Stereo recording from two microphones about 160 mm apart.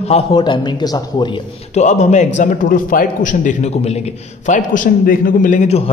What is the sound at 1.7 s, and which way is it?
A man's voice, 45° left (ahead or behind).